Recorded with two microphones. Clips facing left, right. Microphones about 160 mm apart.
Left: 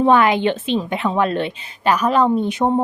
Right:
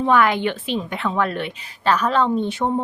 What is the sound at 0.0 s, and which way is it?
A woman's voice, 25° left (ahead or behind).